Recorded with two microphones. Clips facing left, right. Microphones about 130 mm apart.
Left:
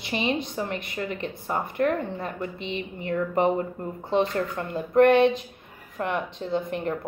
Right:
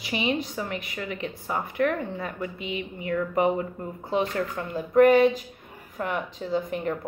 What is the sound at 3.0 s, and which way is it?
Speech, 35° left (ahead or behind).